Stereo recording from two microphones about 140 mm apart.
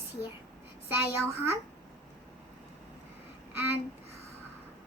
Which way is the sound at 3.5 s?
15° right (ahead or behind).